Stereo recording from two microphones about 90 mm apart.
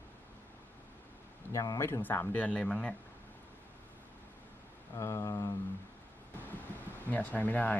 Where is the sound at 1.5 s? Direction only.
35° left (ahead or behind).